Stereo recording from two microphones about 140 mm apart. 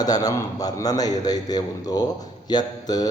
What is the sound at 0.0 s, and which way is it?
Speech, 25° left (ahead or behind).